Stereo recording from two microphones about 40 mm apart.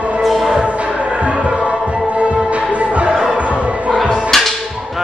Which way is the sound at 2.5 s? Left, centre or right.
Right.